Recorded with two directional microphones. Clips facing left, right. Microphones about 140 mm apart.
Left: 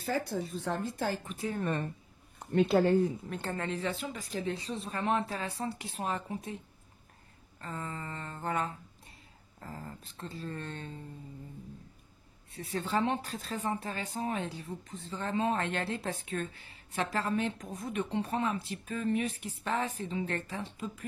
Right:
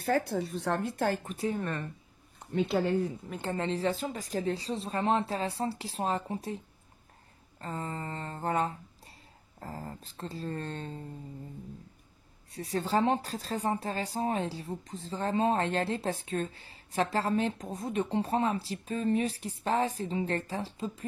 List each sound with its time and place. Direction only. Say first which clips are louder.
0.0 s speech: right 4 dB; 65° right (ahead or behind)
1.2 s a woman's voice: right 4 dB; 35° right (ahead or behind)
3.3 s speech: right 2 dB; 15° right (ahead or behind)
3.6 s a woman's voice: right 7 dB; 35° right (ahead or behind)
7.6 s a woman's voice: right 3 dB; 35° right (ahead or behind)
12.4 s a woman's voice: right 4 dB; 35° right (ahead or behind)